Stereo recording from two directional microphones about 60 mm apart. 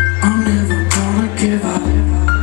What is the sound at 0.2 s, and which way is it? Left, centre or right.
Music, right.